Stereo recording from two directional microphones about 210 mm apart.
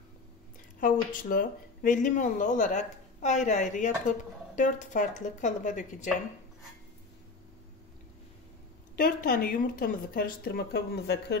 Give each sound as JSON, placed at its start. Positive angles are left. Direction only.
{"t": 0.7, "sound": "speech", "side_deg": 40}
{"t": 8.9, "sound": "speech", "side_deg": 45}